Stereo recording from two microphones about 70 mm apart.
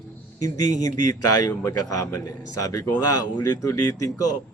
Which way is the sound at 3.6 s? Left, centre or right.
Left.